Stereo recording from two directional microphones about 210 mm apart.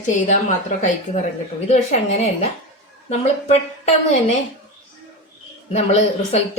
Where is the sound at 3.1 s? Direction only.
30° left (ahead or behind).